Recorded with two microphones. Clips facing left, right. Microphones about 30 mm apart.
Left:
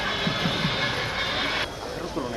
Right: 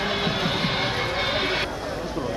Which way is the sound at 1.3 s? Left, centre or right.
Centre.